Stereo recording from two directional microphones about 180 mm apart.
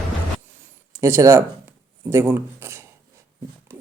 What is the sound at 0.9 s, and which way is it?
Speech, 15° right (ahead or behind).